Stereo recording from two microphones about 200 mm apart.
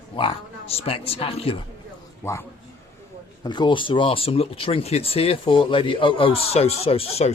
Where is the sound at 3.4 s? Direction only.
20° left (ahead or behind).